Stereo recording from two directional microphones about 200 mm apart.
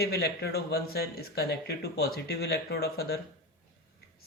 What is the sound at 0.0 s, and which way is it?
Speech, 55° left (ahead or behind).